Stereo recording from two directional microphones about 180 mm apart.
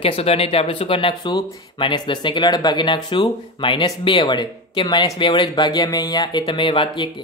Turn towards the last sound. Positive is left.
turn(degrees=25)  # may be behind; listen again after turning